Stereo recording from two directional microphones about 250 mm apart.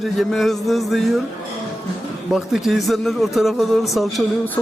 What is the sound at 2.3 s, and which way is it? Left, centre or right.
A man's voice, centre.